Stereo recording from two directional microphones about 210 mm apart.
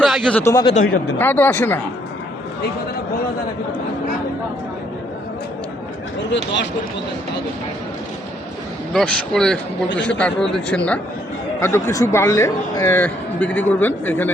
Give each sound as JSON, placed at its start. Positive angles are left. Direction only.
{"t": 0.0, "sound": "a man's voice", "side_deg": 5}
{"t": 6.3, "sound": "speech", "side_deg": 60}
{"t": 8.9, "sound": "a man's voice", "side_deg": 5}